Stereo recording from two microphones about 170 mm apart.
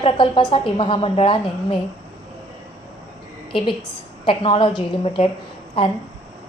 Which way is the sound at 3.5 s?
30° left (ahead or behind).